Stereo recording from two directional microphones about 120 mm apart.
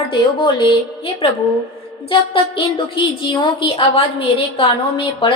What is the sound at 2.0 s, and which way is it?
A woman's voice, 45° left (ahead or behind).